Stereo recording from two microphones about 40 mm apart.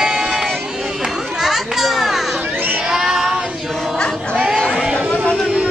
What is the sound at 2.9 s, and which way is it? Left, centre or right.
Child singing, centre.